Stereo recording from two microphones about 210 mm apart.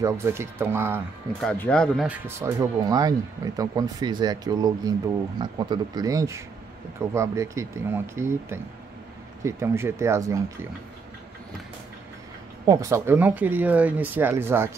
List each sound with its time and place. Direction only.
0.0 s speech: 15° right (ahead or behind)
1.4 s speech: 5° left (ahead or behind)
2.0 s speech: 10° right (ahead or behind)
12.6 s speech: 15° right (ahead or behind)